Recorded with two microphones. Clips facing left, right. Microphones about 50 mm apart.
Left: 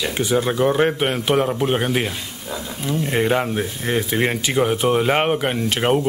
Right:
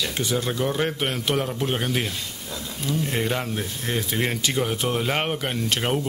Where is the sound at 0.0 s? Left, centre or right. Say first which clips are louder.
Left 6 dB; centre.